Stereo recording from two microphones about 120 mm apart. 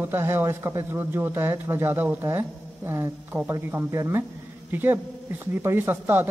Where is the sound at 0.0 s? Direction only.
20° right (ahead or behind).